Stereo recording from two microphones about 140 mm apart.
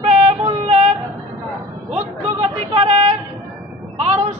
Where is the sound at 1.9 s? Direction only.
50° right (ahead or behind).